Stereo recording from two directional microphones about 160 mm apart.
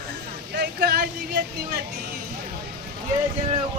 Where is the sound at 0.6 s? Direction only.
85° right.